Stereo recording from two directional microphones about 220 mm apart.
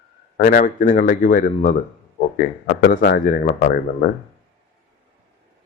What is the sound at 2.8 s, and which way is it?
Speech, 40° left (ahead or behind).